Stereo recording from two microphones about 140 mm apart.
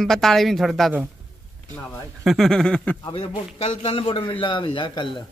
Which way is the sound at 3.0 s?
40° left (ahead or behind).